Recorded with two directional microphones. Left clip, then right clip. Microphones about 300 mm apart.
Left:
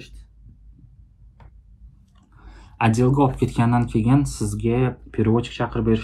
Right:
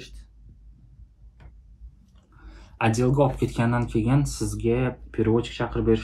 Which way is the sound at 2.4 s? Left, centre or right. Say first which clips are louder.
Left 3 dB; left.